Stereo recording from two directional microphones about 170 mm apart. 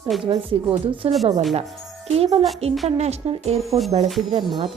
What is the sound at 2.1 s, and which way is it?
A woman's voice, 35° right (ahead or behind).